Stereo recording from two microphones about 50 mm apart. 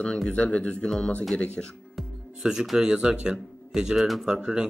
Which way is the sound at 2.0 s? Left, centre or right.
Centre.